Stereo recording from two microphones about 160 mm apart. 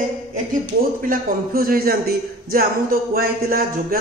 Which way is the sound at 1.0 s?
60° right (ahead or behind).